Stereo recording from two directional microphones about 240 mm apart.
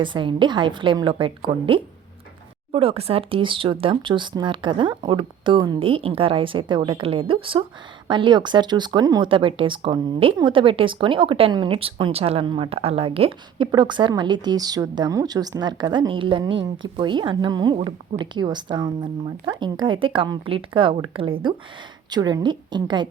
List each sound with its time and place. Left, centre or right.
0.0 s speech: centre
16.6 s speech: right
17.0 s a woman's voice: centre